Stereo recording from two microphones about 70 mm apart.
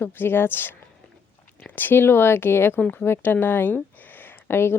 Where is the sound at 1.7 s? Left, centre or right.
Left.